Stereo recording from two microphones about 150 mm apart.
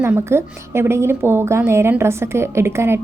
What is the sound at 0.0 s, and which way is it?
A woman's voice, 15° right (ahead or behind).